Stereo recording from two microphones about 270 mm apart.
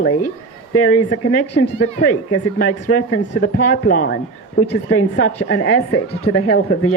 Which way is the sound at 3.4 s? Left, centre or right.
Left.